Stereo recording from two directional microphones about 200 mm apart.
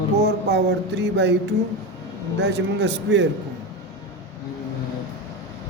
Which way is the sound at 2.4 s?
60° right (ahead or behind).